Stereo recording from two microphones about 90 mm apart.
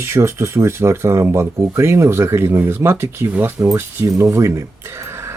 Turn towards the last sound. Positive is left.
turn(degrees=-30)  # may be behind; listen again after turning